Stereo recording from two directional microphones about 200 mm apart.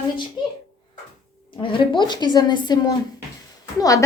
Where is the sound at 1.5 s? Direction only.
25° left (ahead or behind).